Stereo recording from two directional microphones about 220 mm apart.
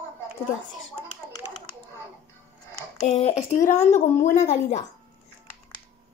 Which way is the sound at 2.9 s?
30° left (ahead or behind).